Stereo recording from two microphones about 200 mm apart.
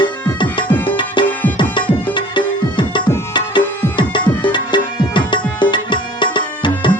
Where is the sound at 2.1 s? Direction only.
25° left (ahead or behind).